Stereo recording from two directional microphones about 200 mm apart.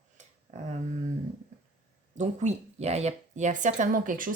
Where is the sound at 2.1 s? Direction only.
35° right (ahead or behind).